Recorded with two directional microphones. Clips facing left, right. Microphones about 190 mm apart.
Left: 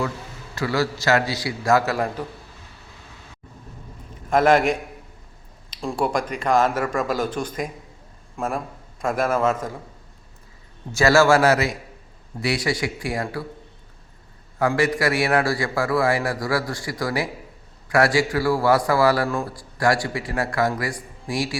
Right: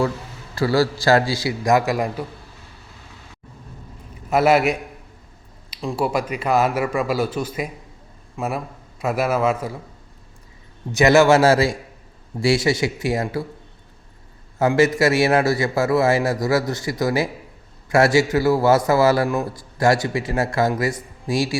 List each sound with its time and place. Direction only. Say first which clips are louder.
0.5 s a man's voice: right 5 dB; 35° right (ahead or behind); by 2.2 s 15° right (ahead or behind)
4.3 s a man's voice: right 1 dB; 5° right (ahead or behind)
10.9 s a man's voice: right 3 dB; 20° right (ahead or behind)
14.6 s a man's voice: right 4 dB; 25° right (ahead or behind)